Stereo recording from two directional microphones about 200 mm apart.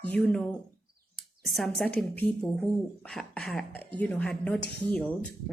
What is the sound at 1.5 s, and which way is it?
Speech, centre (ahead or behind).